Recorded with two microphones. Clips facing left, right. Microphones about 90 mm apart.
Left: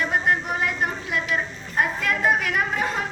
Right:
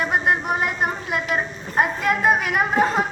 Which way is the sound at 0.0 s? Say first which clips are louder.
Right 2 dB; 20° right (ahead or behind).